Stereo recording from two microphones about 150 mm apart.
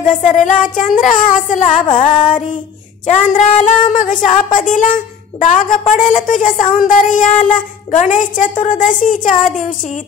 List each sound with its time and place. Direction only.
0.2 s speech: 55° left (ahead or behind)